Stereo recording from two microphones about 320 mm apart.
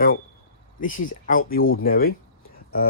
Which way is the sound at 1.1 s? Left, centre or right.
Left.